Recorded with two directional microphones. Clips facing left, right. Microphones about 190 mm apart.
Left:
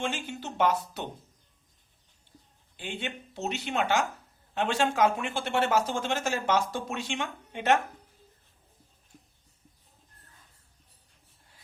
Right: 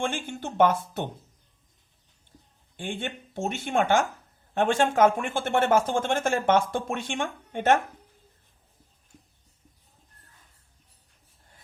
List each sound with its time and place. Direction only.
0.0 s speech: 50° right (ahead or behind)
2.7 s speech: 50° right (ahead or behind)